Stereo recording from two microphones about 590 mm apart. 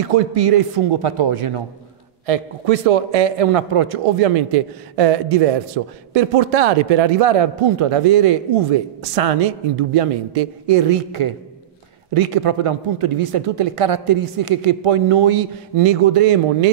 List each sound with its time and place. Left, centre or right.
0.1 s speech: right
2.2 s a man's voice: right